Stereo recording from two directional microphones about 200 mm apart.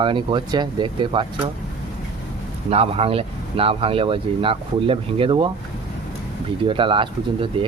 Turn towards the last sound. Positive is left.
turn(degrees=-25)  # may be behind; listen again after turning